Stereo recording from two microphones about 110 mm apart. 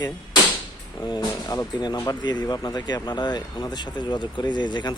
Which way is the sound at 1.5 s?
40° left (ahead or behind).